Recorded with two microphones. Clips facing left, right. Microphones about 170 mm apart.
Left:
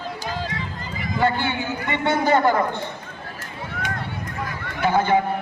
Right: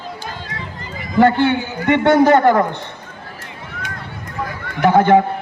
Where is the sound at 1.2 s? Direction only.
70° right (ahead or behind).